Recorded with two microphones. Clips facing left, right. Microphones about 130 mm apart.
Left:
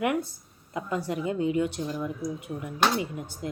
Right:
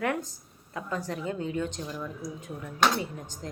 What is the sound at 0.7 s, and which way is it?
Speech, 15° left (ahead or behind).